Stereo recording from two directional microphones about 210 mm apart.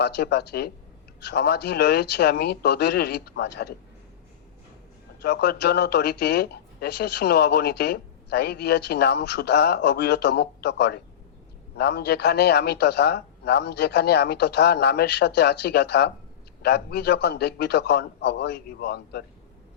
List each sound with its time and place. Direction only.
0.0 s speech: 50° left (ahead or behind)
5.2 s speech: 50° left (ahead or behind)